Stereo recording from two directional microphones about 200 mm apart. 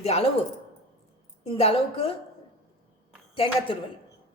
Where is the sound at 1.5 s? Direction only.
30° left (ahead or behind).